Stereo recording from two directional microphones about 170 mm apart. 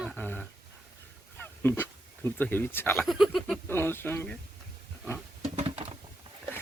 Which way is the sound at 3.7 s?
15° left (ahead or behind).